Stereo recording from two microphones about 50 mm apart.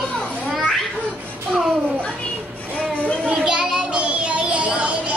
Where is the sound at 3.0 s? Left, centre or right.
Left.